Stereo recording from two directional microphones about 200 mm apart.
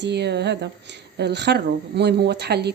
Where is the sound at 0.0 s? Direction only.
60° right (ahead or behind).